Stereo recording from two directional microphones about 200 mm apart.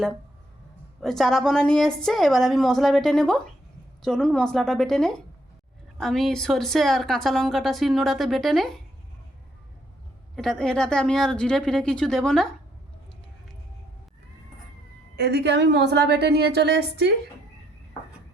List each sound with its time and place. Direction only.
1.0 s a woman's voice: centre (ahead or behind)
10.3 s a woman's voice: centre (ahead or behind)
15.1 s a woman's voice: 55° right (ahead or behind)